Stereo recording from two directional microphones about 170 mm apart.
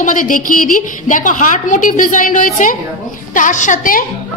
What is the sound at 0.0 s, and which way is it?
A woman's voice, 50° left (ahead or behind).